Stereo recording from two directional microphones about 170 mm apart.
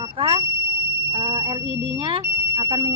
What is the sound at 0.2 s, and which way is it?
Speech, 30° right (ahead or behind).